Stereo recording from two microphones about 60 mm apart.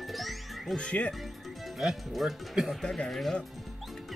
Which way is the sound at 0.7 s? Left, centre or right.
Centre.